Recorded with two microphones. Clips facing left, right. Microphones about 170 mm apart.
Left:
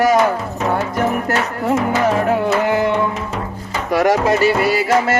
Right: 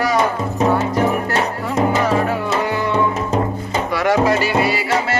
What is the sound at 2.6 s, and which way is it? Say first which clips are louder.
Music: left 4 dB; 50° left (ahead or behind).